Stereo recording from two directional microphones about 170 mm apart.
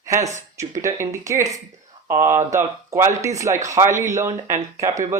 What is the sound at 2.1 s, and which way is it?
Speech, 15° right (ahead or behind).